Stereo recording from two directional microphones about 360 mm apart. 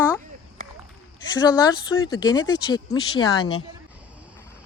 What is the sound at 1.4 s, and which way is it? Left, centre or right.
Speech, centre.